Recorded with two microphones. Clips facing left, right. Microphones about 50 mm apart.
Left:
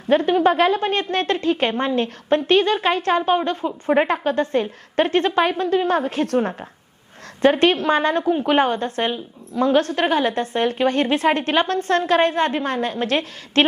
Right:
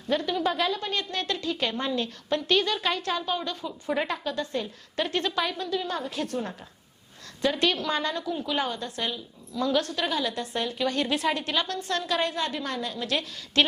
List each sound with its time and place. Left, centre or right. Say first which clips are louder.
0.1 s a woman's voice: left 10 dB; left